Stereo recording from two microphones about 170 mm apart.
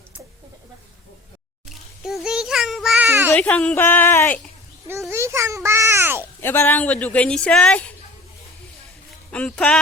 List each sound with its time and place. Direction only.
1.7 s a sound: centre (ahead or behind)
3.3 s speech: 10° left (ahead or behind)
4.9 s a child's voice: 15° right (ahead or behind)
6.4 s speech: 10° left (ahead or behind)
9.3 s speech: 5° left (ahead or behind)